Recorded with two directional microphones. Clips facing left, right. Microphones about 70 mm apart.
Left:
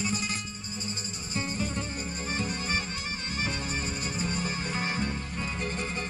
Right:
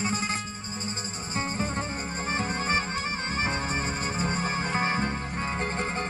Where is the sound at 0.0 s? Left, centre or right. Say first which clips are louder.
Right 3 dB; right.